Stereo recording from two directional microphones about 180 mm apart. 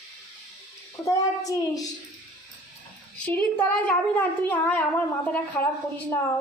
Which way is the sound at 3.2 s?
10° left (ahead or behind).